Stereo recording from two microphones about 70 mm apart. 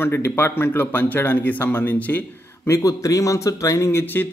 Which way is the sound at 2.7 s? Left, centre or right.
Left.